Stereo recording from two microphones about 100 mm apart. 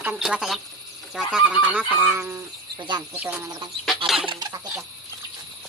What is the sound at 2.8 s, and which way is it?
Speech, 45° right (ahead or behind).